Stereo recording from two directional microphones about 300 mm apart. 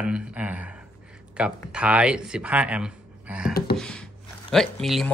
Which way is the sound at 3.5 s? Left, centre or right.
Left.